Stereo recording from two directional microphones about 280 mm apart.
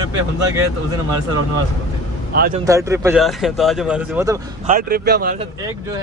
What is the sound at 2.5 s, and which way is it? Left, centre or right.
Speech, centre.